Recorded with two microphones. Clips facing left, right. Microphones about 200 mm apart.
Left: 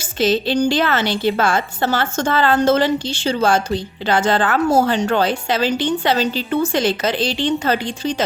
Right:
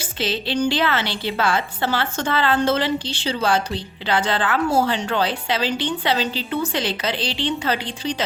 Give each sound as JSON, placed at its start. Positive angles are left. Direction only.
{"t": 0.0, "sound": "a woman's voice", "side_deg": 45}